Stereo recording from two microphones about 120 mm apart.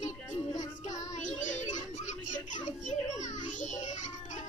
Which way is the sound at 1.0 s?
90° left.